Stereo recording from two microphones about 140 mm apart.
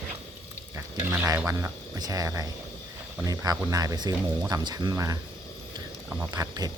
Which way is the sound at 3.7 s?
25° right (ahead or behind).